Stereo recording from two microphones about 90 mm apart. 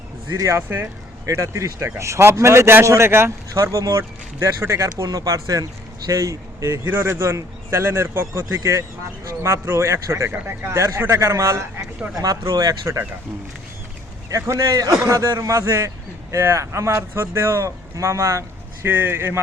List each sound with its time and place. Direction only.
0.3 s speech: 35° right (ahead or behind)
6.8 s speech: 20° right (ahead or behind)
14.3 s speech: 35° right (ahead or behind)
18.9 s speech: 20° right (ahead or behind)